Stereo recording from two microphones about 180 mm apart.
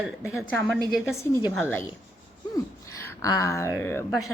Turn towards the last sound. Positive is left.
turn(degrees=15)  # may be behind; listen again after turning